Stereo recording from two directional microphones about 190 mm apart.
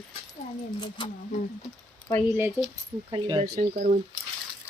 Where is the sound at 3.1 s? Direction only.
25° right (ahead or behind).